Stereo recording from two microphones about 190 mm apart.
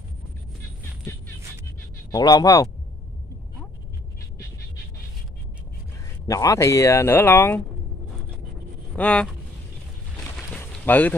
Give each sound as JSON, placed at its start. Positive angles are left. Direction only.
{"t": 2.1, "sound": "speech", "side_deg": 20}
{"t": 6.2, "sound": "speech", "side_deg": 15}
{"t": 8.9, "sound": "speech", "side_deg": 5}
{"t": 10.5, "sound": "a sound", "side_deg": 10}